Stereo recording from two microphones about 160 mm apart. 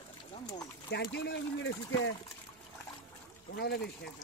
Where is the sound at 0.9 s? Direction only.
90° left.